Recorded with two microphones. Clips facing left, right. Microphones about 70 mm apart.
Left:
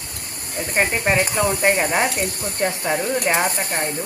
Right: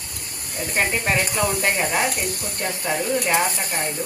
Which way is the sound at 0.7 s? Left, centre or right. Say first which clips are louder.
Left 3 dB; left.